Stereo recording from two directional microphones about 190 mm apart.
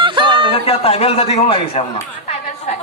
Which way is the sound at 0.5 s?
30° left (ahead or behind).